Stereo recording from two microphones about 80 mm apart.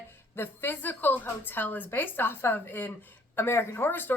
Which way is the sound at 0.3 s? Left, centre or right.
Left.